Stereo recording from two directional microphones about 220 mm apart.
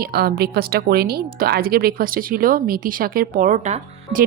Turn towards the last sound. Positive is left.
turn(degrees=-35)  # may be behind; listen again after turning